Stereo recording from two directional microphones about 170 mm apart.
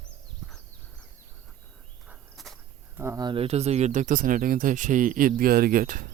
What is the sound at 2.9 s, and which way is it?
Speech, 15° right (ahead or behind).